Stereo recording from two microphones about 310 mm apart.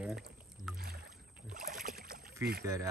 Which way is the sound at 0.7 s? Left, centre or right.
Right.